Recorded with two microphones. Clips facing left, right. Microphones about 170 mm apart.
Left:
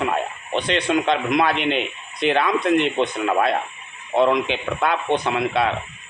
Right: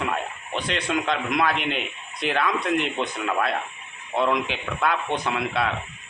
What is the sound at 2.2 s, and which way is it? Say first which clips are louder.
Speech: left 5 dB; 5° right (ahead or behind).